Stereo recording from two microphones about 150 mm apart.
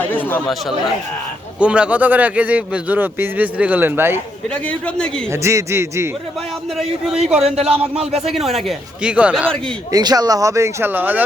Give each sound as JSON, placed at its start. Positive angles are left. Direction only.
{"t": 0.0, "sound": "chatter", "side_deg": 10}
{"t": 1.5, "sound": "a man's voice", "side_deg": -5}
{"t": 4.5, "sound": "a man's voice", "side_deg": 10}
{"t": 5.3, "sound": "a man's voice", "side_deg": -20}
{"t": 6.7, "sound": "speech", "side_deg": -5}
{"t": 7.3, "sound": "speech", "side_deg": -45}
{"t": 7.7, "sound": "a man's voice", "side_deg": -5}
{"t": 9.9, "sound": "speech", "side_deg": -25}